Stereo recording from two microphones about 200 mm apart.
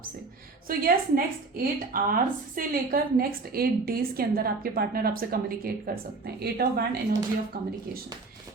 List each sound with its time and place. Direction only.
0.7 s a woman's voice: 45° right (ahead or behind)